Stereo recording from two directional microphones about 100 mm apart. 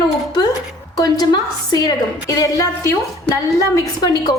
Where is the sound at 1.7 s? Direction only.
40° left (ahead or behind).